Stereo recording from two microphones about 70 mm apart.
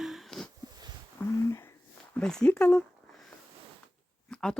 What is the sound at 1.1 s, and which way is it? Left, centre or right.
Speech, left.